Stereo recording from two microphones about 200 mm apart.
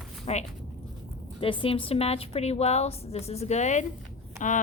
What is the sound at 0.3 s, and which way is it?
A woman's voice, 30° left (ahead or behind).